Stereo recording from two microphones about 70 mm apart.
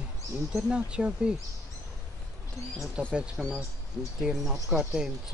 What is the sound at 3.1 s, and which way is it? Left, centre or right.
Speech, centre.